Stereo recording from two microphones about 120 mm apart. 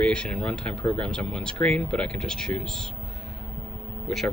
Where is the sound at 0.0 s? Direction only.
10° left (ahead or behind).